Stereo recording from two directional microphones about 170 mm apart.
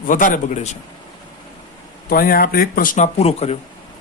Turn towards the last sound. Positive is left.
turn(degrees=40)  # may be behind; listen again after turning